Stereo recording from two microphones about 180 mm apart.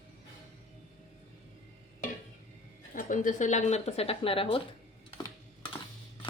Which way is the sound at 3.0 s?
45° left (ahead or behind).